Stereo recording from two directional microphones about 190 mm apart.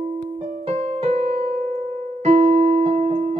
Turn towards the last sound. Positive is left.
turn(degrees=-40)  # may be behind; listen again after turning